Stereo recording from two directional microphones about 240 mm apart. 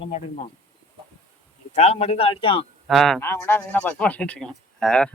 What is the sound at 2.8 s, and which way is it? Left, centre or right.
Speech, centre.